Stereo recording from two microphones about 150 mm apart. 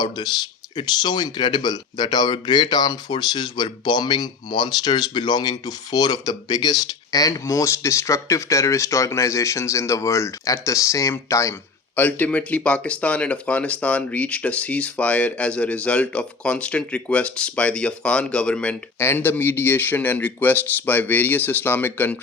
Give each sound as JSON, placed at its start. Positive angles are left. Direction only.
{"t": 0.2, "sound": "speech", "side_deg": 30}